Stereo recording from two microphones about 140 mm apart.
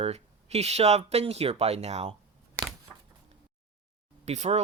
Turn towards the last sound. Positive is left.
turn(degrees=-50)  # may be behind; listen again after turning